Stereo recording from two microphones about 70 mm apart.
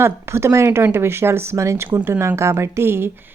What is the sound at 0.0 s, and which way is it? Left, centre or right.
A woman's voice, right.